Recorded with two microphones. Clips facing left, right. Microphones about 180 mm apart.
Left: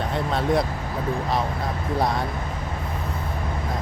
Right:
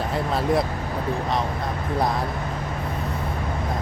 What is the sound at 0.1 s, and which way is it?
Speech, centre (ahead or behind).